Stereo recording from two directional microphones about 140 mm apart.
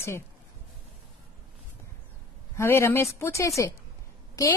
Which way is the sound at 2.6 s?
20° left (ahead or behind).